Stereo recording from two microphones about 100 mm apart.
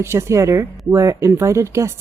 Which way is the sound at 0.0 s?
25° right (ahead or behind).